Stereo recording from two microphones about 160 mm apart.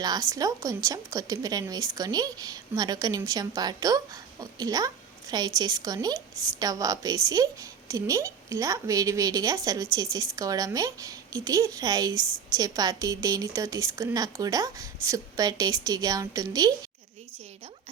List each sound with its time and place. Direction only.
0.0 s a woman's voice: 20° right (ahead or behind)